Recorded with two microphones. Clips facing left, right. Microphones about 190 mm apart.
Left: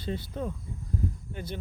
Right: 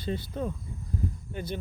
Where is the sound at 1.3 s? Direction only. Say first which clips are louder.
Right 3 dB; 10° right (ahead or behind).